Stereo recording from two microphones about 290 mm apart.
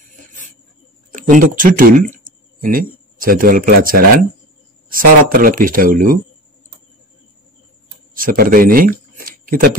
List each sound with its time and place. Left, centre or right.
1.1 s speech: right
8.1 s speech: right